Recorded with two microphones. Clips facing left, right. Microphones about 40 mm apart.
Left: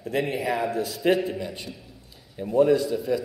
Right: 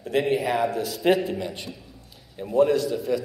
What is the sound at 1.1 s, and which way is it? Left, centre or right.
Speech, right.